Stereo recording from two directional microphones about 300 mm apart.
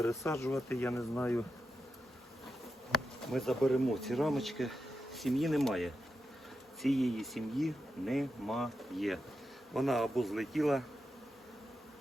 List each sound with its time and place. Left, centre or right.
0.0 s speech: centre
2.9 s speech: centre